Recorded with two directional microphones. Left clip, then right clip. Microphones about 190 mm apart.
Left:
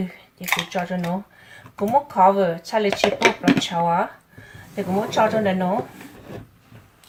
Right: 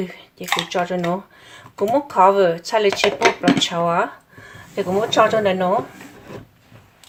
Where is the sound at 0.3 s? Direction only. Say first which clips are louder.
Right 3 dB; 50° right (ahead or behind).